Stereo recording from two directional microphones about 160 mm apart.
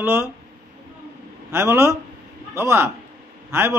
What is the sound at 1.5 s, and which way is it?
A man's voice, 15° right (ahead or behind).